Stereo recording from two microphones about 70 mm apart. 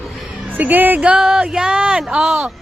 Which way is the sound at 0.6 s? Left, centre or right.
Right.